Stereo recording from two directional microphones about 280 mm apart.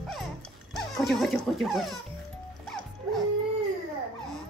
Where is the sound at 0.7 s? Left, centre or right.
Centre.